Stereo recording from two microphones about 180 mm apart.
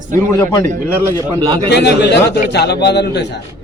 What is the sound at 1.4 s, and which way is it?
Speech, 25° right (ahead or behind).